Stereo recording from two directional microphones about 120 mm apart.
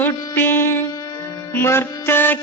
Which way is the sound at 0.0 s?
15° left (ahead or behind).